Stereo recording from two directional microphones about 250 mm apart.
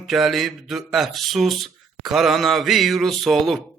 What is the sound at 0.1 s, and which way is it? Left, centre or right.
Speech, centre.